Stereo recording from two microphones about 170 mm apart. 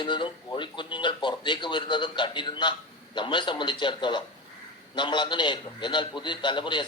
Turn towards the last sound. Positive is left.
turn(degrees=25)  # may be behind; listen again after turning